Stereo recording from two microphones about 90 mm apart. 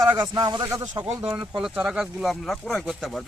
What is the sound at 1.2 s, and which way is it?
A man's voice, 10° right (ahead or behind).